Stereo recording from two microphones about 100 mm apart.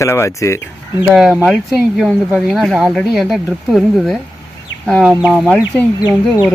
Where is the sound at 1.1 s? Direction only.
5° right (ahead or behind).